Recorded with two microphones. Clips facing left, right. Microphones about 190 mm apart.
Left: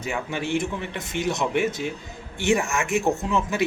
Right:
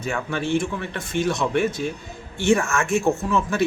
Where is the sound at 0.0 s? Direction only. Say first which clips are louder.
Right 2 dB; 15° left (ahead or behind).